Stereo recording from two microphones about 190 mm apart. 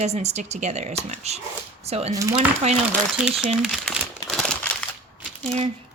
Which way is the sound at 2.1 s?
15° right (ahead or behind).